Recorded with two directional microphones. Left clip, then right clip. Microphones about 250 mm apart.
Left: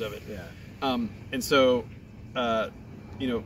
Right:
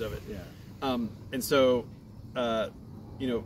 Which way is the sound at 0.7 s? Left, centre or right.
Centre.